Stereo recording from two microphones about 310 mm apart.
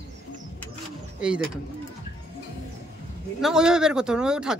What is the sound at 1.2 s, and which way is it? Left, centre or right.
Speech, centre.